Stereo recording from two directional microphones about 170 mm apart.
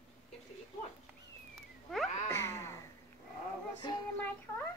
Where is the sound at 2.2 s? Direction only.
15° left (ahead or behind).